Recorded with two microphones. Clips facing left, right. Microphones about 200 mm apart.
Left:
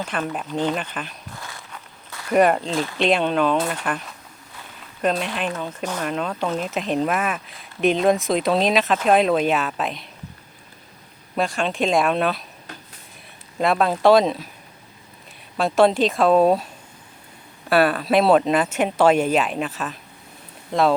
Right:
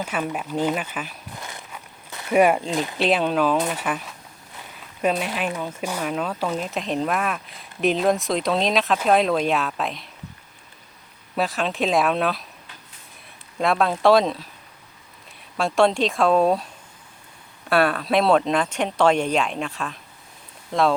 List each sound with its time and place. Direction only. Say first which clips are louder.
0.0 s speech: even; 10° right (ahead or behind)
1.4 s walk: right 2 dB; 20° right (ahead or behind)
2.3 s speech: even; 10° right (ahead or behind)
3.0 s speech: left 1 dB; 5° right (ahead or behind)
11.3 s speech: left 1 dB; centre (ahead or behind)
13.6 s speech: left 1 dB; centre (ahead or behind)
15.5 s speech: left 2 dB; centre (ahead or behind)
17.7 s speech: left 2 dB; 5° left (ahead or behind)